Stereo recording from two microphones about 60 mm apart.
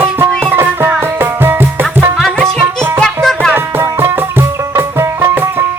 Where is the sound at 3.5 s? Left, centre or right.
Right.